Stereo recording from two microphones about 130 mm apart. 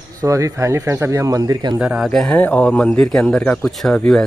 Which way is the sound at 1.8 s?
10° right (ahead or behind).